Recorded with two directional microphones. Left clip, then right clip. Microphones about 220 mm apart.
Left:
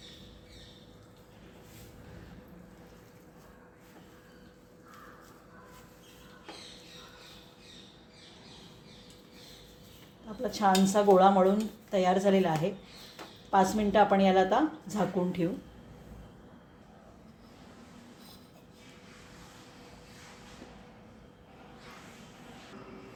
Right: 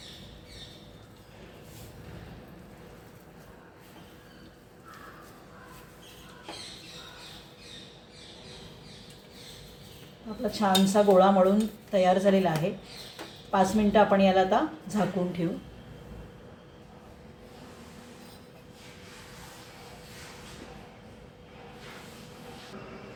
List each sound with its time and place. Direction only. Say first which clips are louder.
10.5 s a woman's voice: right 1 dB; 30° left (ahead or behind)